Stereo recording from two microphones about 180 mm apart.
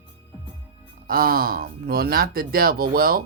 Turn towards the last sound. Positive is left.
turn(degrees=-55)  # may be behind; listen again after turning